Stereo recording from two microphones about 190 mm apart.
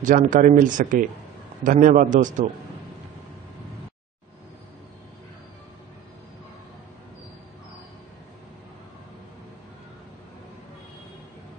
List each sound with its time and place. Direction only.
0.0 s speech: 45° right (ahead or behind)